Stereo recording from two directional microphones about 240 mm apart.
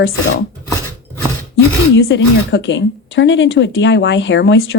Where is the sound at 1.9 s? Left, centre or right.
Left.